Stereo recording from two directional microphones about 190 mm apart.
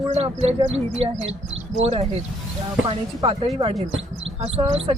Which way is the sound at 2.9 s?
30° right (ahead or behind).